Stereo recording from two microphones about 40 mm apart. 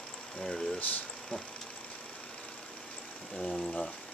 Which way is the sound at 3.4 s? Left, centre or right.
Left.